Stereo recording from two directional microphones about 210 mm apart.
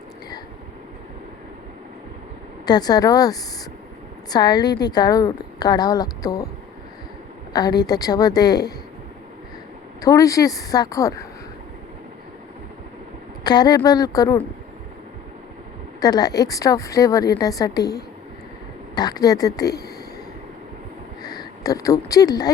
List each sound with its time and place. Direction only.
2.6 s a woman's voice: 20° left (ahead or behind)
7.5 s a woman's voice: 20° left (ahead or behind)
10.0 s a woman's voice: 15° left (ahead or behind)
13.4 s a woman's voice: 20° left (ahead or behind)
16.0 s a woman's voice: 20° left (ahead or behind)
21.2 s speech: 15° left (ahead or behind)